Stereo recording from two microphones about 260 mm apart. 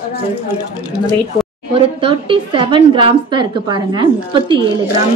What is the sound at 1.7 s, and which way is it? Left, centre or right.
A woman's voice, right.